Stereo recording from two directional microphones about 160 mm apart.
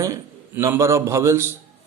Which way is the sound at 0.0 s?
20° right (ahead or behind).